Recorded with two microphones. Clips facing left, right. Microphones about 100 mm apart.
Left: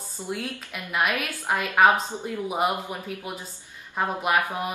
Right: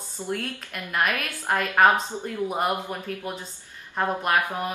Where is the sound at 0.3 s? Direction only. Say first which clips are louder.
Right 1 dB; 15° left (ahead or behind).